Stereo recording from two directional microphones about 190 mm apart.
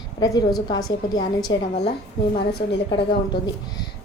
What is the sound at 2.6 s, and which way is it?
Speech, 30° left (ahead or behind).